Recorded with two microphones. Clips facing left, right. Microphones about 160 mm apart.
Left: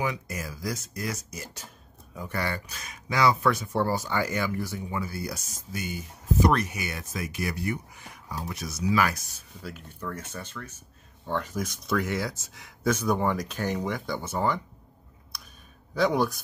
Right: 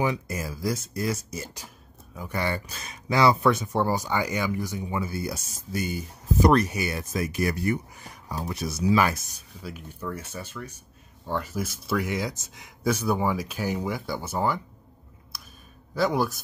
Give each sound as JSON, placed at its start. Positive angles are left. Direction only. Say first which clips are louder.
{"t": 0.0, "sound": "speech", "louder": "right 4 dB", "side_deg": -30}
{"t": 5.7, "sound": "speech", "louder": "right 5 dB", "side_deg": -40}
{"t": 9.3, "sound": "speech", "louder": "right 1 dB", "side_deg": -10}
{"t": 15.3, "sound": "clicking", "louder": "even", "side_deg": -5}
{"t": 15.9, "sound": "speech", "louder": "even", "side_deg": 0}